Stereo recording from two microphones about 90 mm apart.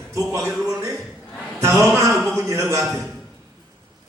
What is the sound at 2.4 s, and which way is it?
Mantra, 30° right (ahead or behind).